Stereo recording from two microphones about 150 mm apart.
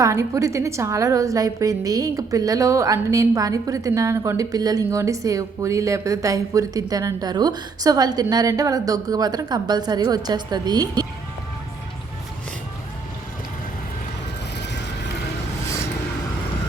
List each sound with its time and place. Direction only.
0.0 s a woman's voice: 20° right (ahead or behind)